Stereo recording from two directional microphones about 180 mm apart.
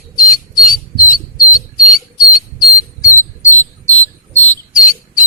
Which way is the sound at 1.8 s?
50° left (ahead or behind).